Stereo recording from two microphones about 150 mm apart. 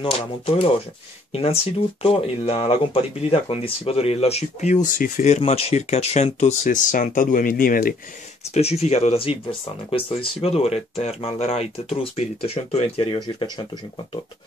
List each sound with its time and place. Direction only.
1.3 s speech: 40° left (ahead or behind)
4.8 s speech: 60° left (ahead or behind)
8.5 s speech: 45° left (ahead or behind)